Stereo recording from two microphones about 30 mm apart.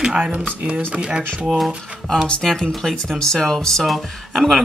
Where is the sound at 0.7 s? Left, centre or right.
Right.